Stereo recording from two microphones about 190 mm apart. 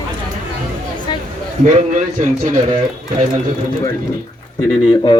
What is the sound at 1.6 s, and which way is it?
Speech, 40° right (ahead or behind).